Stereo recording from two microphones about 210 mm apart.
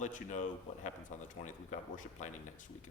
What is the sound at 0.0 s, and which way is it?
Speech, 35° left (ahead or behind).